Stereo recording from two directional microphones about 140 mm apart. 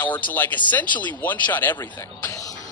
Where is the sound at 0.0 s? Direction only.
15° left (ahead or behind).